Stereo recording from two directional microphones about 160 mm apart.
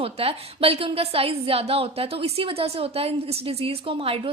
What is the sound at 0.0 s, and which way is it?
A woman's voice, 35° right (ahead or behind).